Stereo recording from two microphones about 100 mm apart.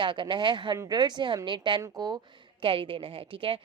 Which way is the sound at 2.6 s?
65° right (ahead or behind).